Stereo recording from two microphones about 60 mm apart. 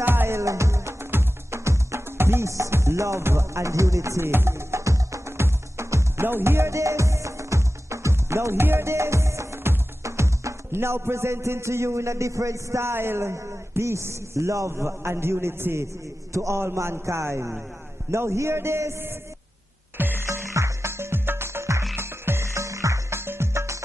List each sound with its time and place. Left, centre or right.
0.0 s music: right
0.4 s music: right
4.3 s music: right
6.2 s music: right
14.7 s a man's voice: right
20.0 s music: right
20.2 s music: right